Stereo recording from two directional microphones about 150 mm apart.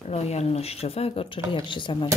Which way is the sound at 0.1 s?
45° left (ahead or behind).